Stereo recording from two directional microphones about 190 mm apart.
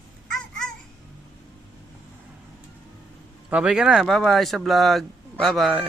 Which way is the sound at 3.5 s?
5° right (ahead or behind).